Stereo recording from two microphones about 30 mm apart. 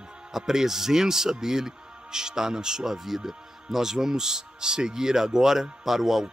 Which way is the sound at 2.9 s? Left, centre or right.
Centre.